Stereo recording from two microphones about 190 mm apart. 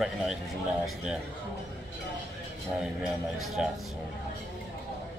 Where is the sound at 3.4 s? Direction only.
Centre (ahead or behind).